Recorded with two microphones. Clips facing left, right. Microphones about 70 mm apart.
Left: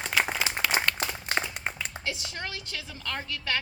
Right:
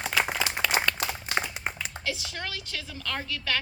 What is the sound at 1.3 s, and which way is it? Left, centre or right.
Clapping, centre.